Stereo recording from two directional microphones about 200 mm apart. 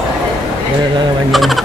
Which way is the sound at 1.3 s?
Centre (ahead or behind).